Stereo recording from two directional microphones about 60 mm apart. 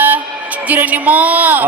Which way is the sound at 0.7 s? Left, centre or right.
Right.